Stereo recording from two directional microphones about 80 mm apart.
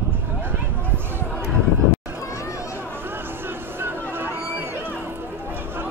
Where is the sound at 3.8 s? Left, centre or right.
Right.